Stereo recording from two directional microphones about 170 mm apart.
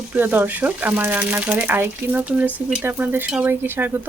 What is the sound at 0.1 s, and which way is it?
Speech, 10° right (ahead or behind).